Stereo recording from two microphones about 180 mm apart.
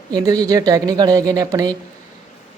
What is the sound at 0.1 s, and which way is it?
A woman's voice, 20° right (ahead or behind).